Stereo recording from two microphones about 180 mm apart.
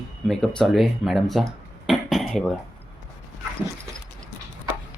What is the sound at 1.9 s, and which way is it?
Cough, centre (ahead or behind).